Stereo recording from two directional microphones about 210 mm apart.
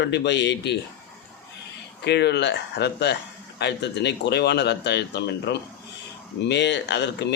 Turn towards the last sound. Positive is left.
turn(degrees=55)  # may be behind; listen again after turning